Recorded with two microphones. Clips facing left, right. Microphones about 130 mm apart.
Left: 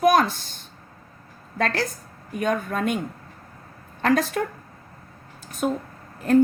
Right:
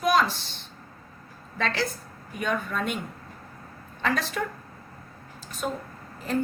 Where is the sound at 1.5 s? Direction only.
45° left (ahead or behind).